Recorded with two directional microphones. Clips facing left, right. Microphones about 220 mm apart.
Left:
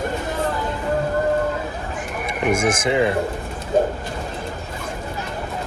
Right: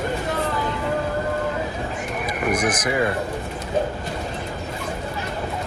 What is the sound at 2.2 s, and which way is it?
Speech, 25° left (ahead or behind).